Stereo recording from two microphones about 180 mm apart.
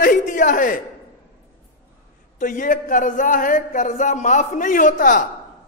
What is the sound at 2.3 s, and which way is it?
A man's voice, 45° left (ahead or behind).